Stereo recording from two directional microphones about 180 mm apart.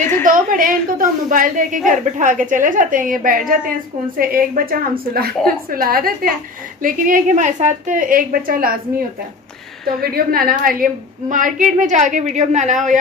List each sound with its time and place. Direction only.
0.2 s a woman's voice: 50° right (ahead or behind)
9.8 s a woman's voice: 55° right (ahead or behind)